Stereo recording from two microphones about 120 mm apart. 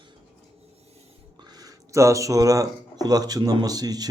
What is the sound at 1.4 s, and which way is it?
Speech, 35° right (ahead or behind).